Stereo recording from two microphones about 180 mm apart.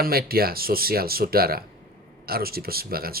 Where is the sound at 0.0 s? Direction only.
55° right (ahead or behind).